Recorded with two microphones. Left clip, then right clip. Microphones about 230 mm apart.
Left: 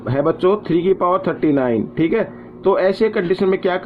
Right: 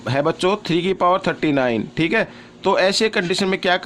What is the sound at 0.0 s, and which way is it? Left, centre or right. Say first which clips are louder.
Speech: left 2 dB; right.